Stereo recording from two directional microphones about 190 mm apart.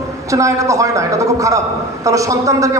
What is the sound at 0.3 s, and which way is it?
A man's voice, 15° right (ahead or behind).